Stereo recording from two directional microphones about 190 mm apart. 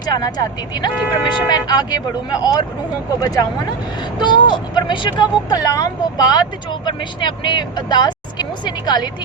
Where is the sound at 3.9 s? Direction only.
25° left (ahead or behind).